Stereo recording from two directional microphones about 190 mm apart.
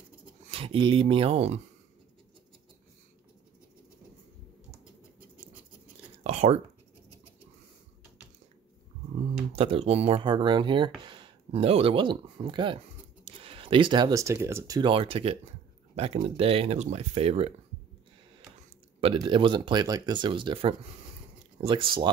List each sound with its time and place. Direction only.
0.5 s speech: 30° right (ahead or behind)
6.1 s whispering: 30° right (ahead or behind)
9.5 s speech: 30° right (ahead or behind)
19.1 s speech: 25° right (ahead or behind)